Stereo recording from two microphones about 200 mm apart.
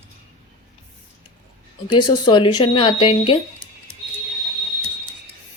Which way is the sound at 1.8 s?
20° left (ahead or behind).